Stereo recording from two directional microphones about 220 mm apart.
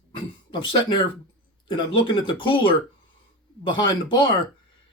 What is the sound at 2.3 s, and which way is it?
Speech, 25° left (ahead or behind).